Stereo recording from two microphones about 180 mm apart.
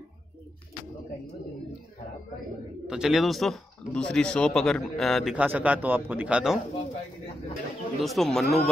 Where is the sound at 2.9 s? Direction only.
5° right (ahead or behind).